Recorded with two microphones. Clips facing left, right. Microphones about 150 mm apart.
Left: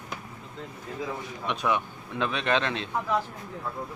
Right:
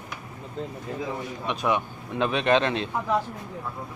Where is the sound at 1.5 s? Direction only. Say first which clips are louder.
Right 2 dB; 15° right (ahead or behind).